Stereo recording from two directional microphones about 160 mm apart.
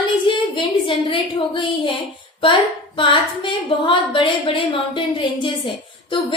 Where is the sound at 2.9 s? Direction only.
30° left (ahead or behind).